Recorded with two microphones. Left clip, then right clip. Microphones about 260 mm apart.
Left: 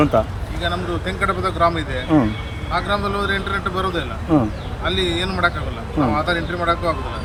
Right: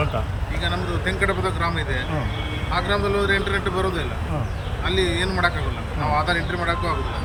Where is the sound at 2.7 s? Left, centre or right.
Centre.